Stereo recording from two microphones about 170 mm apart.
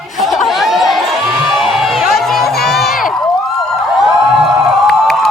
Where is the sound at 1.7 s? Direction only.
Centre (ahead or behind).